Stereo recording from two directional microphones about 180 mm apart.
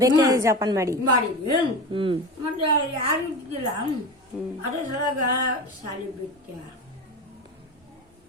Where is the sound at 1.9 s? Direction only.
30° right (ahead or behind).